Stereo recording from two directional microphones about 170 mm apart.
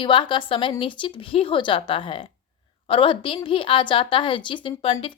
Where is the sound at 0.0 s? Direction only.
30° left (ahead or behind).